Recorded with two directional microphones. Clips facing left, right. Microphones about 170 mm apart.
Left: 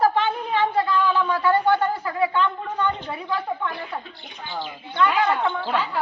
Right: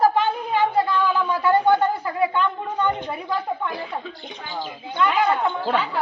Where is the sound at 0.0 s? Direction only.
10° right (ahead or behind).